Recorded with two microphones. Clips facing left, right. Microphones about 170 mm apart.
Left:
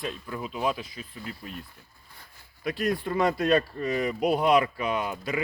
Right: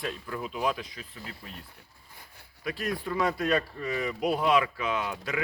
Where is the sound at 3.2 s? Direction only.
25° left (ahead or behind).